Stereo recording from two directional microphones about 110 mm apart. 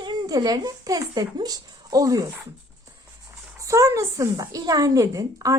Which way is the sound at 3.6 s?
30° right (ahead or behind).